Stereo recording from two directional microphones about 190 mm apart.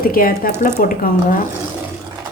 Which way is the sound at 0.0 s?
50° left (ahead or behind).